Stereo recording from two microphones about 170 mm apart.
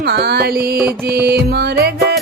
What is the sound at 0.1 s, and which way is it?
Music, 70° right (ahead or behind).